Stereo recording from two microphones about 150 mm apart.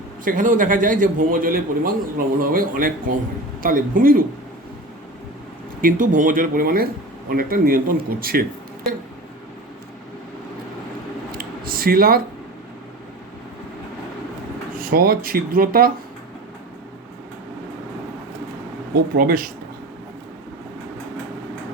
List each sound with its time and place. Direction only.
0.3 s a man's voice: 60° right (ahead or behind)
5.8 s a man's voice: 60° right (ahead or behind); by 8.4 s 80° right
11.3 s a sound: 80° right
14.8 s a man's voice: 75° right (ahead or behind)
19.1 s a man's voice: 75° right (ahead or behind)